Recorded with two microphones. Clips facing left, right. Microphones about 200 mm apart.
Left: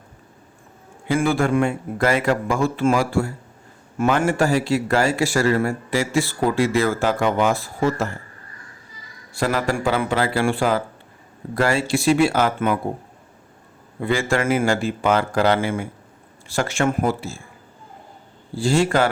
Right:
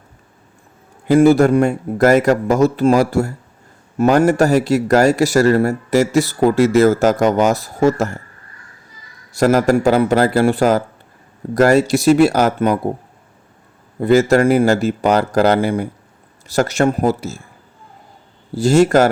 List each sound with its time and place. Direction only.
1.0 s a man's voice: 40° right (ahead or behind)
9.3 s a man's voice: 45° right (ahead or behind)
14.0 s a man's voice: 40° right (ahead or behind)
18.5 s speech: 45° right (ahead or behind)